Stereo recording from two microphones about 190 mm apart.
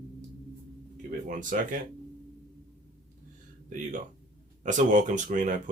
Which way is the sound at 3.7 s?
40° right (ahead or behind).